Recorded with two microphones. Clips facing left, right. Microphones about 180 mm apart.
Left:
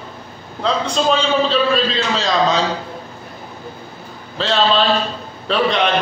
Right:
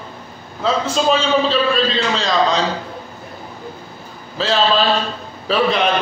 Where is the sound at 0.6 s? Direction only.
5° right (ahead or behind).